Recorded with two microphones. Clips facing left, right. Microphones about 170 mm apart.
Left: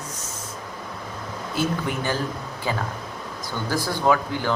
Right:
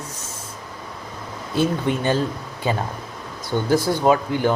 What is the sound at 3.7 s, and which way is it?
Speech, 25° right (ahead or behind).